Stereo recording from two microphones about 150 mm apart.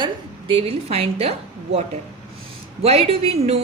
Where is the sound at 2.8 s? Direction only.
40° right (ahead or behind).